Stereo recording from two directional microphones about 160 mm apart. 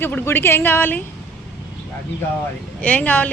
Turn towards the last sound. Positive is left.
turn(degrees=10)  # may be behind; listen again after turning